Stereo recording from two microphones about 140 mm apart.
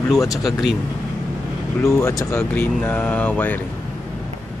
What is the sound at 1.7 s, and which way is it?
Speech, 20° left (ahead or behind).